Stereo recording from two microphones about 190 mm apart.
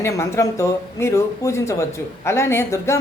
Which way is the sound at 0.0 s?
15° left (ahead or behind).